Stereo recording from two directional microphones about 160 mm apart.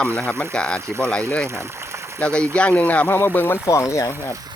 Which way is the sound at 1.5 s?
15° right (ahead or behind).